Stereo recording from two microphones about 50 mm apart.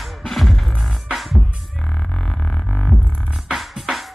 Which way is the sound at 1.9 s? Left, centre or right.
Centre.